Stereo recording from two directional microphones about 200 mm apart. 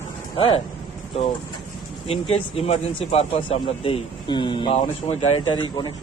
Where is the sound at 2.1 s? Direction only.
30° left (ahead or behind).